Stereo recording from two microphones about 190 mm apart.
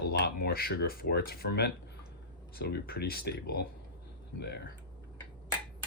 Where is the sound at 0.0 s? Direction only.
55° left (ahead or behind).